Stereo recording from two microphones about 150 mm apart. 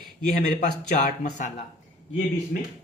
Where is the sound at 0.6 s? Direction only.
55° left (ahead or behind).